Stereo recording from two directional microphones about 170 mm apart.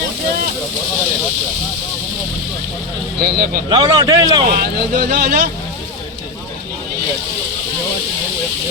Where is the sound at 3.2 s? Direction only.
60° right (ahead or behind).